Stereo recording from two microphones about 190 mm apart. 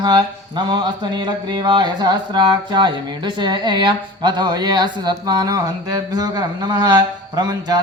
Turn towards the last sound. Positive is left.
turn(degrees=-20)  # may be behind; listen again after turning